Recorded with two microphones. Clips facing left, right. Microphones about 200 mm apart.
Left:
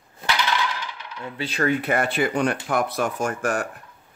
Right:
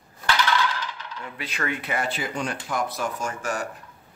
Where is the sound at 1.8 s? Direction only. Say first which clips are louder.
Left 6 dB; 60° left (ahead or behind).